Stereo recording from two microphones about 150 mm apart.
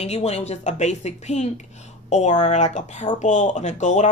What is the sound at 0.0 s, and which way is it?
Speech, 45° left (ahead or behind).